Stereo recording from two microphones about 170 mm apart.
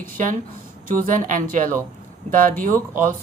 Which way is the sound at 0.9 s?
55° right (ahead or behind).